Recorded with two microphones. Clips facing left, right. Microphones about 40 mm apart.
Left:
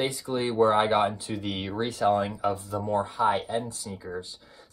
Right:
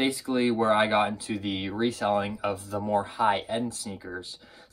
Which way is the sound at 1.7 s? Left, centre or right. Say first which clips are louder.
Left 2 dB; right.